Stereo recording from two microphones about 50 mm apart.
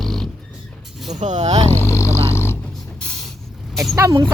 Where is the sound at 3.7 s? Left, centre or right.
Centre.